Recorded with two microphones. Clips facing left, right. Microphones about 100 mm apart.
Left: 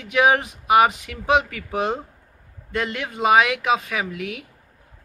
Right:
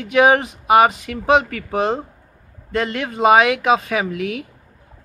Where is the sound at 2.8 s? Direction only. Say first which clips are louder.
Right 5 dB; 5° left (ahead or behind).